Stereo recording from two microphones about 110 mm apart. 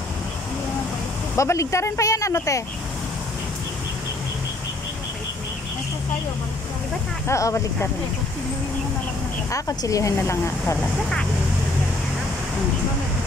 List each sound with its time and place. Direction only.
1.3 s speech: 25° left (ahead or behind)
7.2 s speech: 25° left (ahead or behind)
9.5 s speech: 30° left (ahead or behind)